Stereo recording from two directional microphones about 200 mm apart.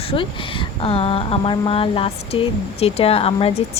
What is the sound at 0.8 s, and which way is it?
A woman's voice, 30° left (ahead or behind).